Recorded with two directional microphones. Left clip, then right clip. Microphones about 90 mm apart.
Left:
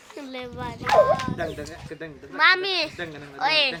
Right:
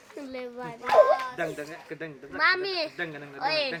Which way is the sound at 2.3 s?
35° left (ahead or behind).